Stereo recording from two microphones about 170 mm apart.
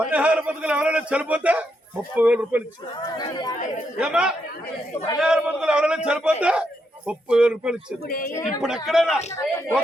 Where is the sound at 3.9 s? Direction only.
5° right (ahead or behind).